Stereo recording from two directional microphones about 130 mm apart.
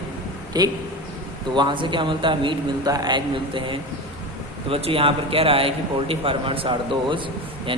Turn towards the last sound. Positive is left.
turn(degrees=-40)  # may be behind; listen again after turning